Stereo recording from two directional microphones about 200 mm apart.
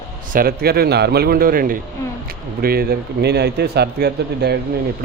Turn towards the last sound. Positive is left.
turn(degrees=-55)  # may be behind; listen again after turning